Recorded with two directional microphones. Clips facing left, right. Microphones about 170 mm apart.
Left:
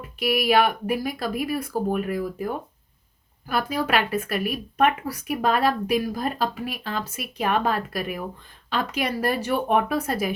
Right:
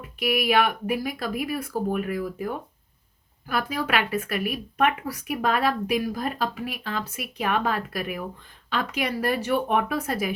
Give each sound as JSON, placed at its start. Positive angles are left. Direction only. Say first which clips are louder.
{"t": 0.2, "sound": "a woman's voice", "louder": "left 2 dB", "side_deg": 35}
{"t": 3.5, "sound": "a woman's voice", "louder": "left 2 dB", "side_deg": 35}